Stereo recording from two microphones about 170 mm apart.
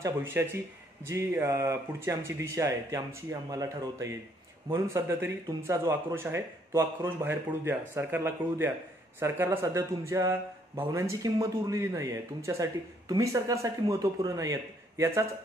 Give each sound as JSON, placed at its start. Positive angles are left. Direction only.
{"t": 0.0, "sound": "a man's voice", "side_deg": -15}